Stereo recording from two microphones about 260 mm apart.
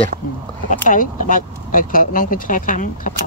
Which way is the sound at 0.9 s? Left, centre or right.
Left.